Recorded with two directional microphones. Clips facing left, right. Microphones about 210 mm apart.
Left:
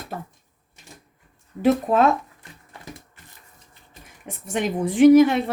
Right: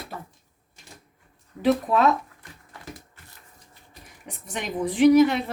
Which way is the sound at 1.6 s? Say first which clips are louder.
Left 2 dB; 50° left (ahead or behind).